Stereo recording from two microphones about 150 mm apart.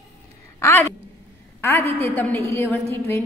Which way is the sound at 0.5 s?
15° left (ahead or behind).